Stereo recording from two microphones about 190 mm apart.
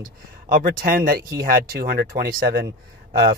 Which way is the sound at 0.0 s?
50° right (ahead or behind).